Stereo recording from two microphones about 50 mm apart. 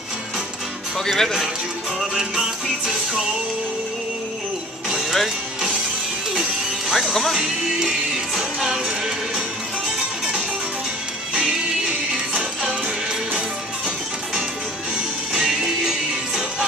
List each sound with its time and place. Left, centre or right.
0.9 s speech: centre
4.8 s music: centre
6.9 s speech: centre
7.4 s music: centre
15.3 s music: centre